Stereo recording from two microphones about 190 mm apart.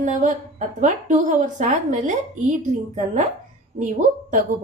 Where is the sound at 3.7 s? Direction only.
45° right (ahead or behind).